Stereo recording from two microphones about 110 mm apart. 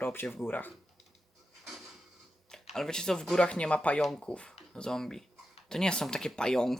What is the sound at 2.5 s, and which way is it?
Speech, 5° left (ahead or behind).